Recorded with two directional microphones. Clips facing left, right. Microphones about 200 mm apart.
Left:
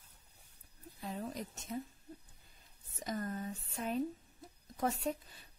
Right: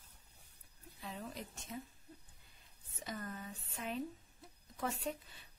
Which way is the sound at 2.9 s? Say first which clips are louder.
Left 6 dB; 40° left (ahead or behind).